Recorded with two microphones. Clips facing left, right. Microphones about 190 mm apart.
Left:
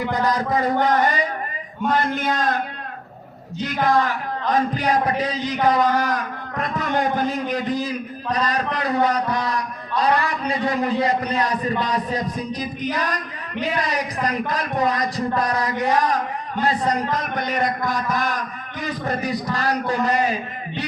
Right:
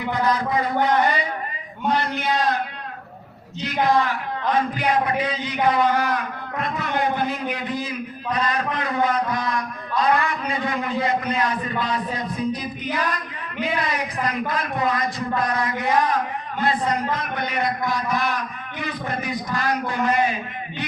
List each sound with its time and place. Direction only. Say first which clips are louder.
0.1 s a man's voice: right 2 dB; 40° left (ahead or behind)
4.5 s a man's voice: left 2 dB; 40° left (ahead or behind)